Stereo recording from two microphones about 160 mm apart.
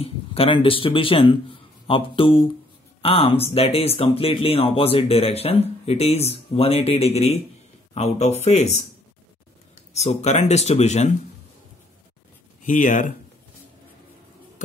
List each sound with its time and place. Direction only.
0.0 s speech: 35° left (ahead or behind)
9.9 s speech: 45° left (ahead or behind)
12.6 s speech: 55° left (ahead or behind)